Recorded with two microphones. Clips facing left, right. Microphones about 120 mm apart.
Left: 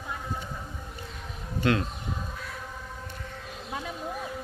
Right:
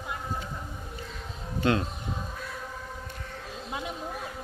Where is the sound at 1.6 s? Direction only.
30° right (ahead or behind).